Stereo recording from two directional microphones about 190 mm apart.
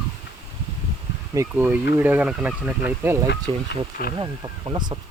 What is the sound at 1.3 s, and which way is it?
Speech, 15° right (ahead or behind).